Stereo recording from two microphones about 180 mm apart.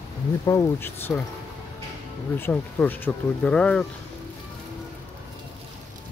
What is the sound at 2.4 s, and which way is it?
Speech, 10° left (ahead or behind).